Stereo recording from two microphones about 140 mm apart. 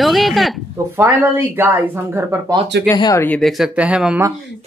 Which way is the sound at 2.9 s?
30° left (ahead or behind).